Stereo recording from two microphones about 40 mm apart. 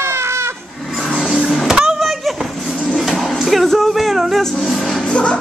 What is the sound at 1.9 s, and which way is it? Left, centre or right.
Vehicle, centre.